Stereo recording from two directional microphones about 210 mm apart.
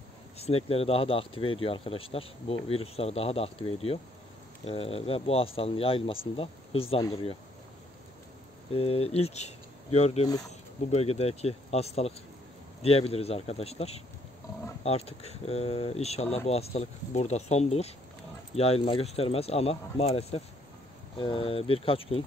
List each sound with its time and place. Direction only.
0.4 s speech: 30° left (ahead or behind)
8.7 s speech: 30° left (ahead or behind)